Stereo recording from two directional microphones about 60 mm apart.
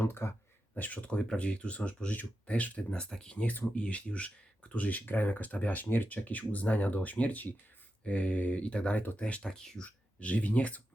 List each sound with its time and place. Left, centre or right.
0.0 s speech: left
0.7 s speech: left
9.8 s speech: left